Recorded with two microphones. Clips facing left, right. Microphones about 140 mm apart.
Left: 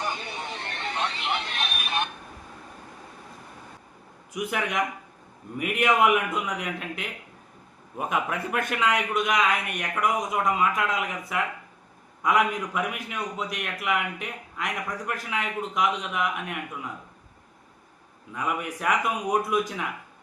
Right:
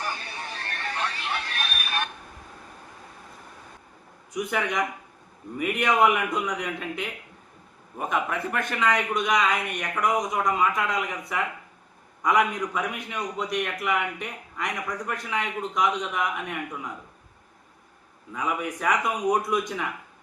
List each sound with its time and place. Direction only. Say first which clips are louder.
0.0 s a sound: left 2 dB; 20° left (ahead or behind)
5.5 s a man's voice: even; 5° left (ahead or behind)
18.3 s a man's voice: right 1 dB; centre (ahead or behind)